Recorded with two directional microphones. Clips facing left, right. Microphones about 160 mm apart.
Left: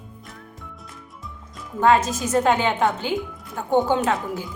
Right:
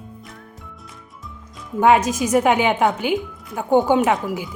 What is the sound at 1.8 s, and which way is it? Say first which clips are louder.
A woman's voice: right 3 dB; 15° right (ahead or behind).